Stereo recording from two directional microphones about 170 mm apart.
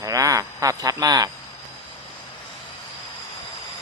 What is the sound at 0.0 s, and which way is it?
Cricket, 20° right (ahead or behind).